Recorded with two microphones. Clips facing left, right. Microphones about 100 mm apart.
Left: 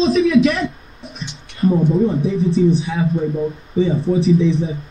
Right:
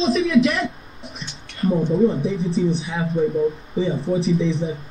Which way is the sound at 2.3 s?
Centre (ahead or behind).